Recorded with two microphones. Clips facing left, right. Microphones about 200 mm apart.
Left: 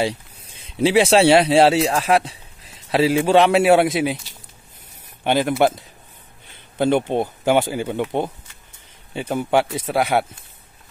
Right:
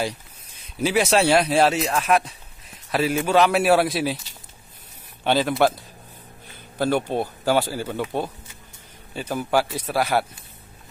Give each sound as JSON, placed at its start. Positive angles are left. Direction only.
{"t": 0.0, "sound": "a man's voice", "side_deg": 30}
{"t": 5.2, "sound": "a man's voice", "side_deg": 15}
{"t": 6.5, "sound": "speech", "side_deg": 20}
{"t": 9.3, "sound": "speech", "side_deg": 25}